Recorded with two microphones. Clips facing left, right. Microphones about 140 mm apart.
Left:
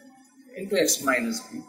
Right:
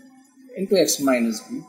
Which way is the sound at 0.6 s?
30° right (ahead or behind).